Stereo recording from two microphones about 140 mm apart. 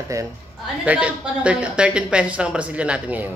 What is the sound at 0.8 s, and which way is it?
Speech, 10° right (ahead or behind).